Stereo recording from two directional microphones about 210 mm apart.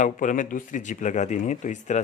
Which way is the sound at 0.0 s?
35° left (ahead or behind).